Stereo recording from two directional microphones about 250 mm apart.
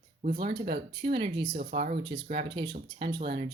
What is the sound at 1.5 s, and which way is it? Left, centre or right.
Speech, right.